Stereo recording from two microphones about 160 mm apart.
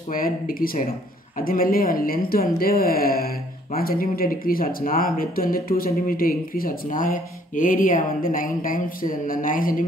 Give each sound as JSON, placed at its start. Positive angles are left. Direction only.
{"t": 0.1, "sound": "speech", "side_deg": 60}